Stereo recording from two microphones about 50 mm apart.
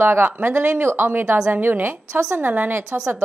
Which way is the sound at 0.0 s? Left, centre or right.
Right.